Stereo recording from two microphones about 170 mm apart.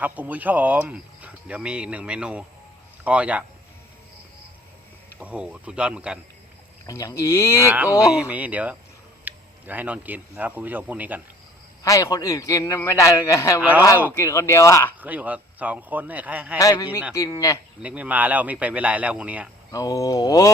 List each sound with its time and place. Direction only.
0.0 s speech: 10° right (ahead or behind)
5.2 s speech: 5° right (ahead or behind)
6.8 s speech: 20° left (ahead or behind)
7.6 s speech: 10° right (ahead or behind)
11.8 s a man's voice: 20° left (ahead or behind)
13.6 s speech: 10° right (ahead or behind)
14.1 s speech: 15° left (ahead or behind)
15.0 s speech: 10° right (ahead or behind)
16.6 s a man's voice: 20° left (ahead or behind)
17.8 s speech: 10° right (ahead or behind)
19.7 s a man's voice: 20° left (ahead or behind)